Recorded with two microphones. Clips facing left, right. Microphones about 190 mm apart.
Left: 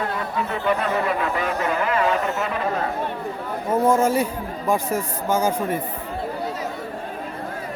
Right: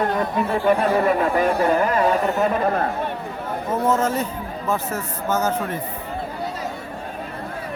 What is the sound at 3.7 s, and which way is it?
Speech, 10° left (ahead or behind).